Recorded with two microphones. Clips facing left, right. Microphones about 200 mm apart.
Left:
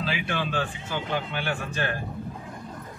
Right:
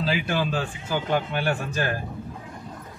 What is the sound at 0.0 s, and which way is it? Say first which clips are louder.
A man's voice: right 4 dB; 40° right (ahead or behind).